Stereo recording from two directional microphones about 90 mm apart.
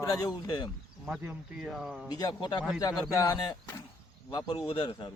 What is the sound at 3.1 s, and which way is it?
Speech, 40° left (ahead or behind).